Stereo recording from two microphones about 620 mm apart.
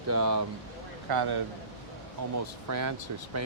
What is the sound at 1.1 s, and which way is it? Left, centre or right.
Speech, right.